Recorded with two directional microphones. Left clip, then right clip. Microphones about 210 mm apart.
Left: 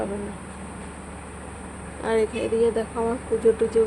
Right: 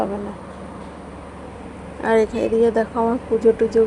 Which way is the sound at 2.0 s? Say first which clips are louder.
Right 6 dB; 20° right (ahead or behind).